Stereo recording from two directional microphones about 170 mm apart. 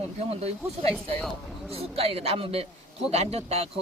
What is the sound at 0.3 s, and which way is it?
Speech, 35° right (ahead or behind).